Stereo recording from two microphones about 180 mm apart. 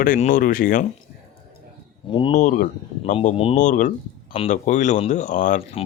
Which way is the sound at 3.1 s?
30° left (ahead or behind).